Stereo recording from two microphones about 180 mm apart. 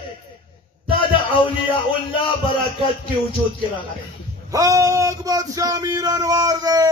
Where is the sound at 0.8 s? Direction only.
30° left (ahead or behind).